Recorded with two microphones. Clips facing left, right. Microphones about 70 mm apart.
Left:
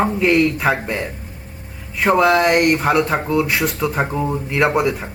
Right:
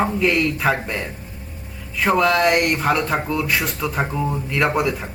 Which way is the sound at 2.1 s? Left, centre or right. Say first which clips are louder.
Left 4 dB; left.